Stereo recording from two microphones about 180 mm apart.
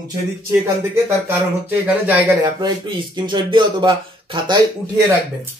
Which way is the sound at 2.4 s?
25° right (ahead or behind).